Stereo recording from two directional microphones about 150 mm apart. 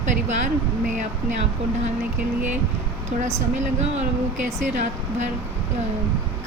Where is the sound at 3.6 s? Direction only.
50° right (ahead or behind).